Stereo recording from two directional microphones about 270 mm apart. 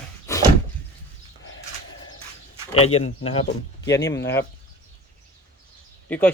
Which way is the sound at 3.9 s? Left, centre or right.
Centre.